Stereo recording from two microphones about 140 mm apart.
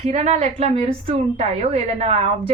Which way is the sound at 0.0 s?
50° right (ahead or behind).